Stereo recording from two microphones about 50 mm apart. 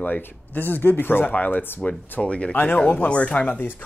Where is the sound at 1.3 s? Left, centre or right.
Left.